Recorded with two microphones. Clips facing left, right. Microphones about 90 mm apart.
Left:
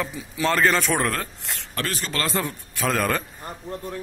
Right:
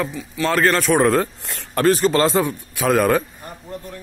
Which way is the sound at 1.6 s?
40° right (ahead or behind).